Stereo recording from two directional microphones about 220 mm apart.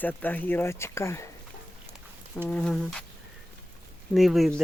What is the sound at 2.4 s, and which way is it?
Speech, 5° left (ahead or behind).